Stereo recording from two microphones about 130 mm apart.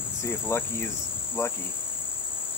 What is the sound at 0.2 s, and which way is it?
Cricket, 20° left (ahead or behind).